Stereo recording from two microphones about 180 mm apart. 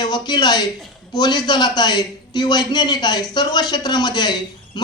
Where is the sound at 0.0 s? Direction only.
25° left (ahead or behind).